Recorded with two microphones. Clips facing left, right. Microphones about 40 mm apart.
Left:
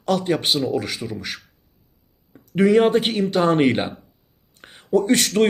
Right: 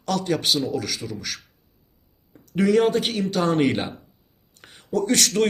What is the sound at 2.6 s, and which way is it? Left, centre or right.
Speech, left.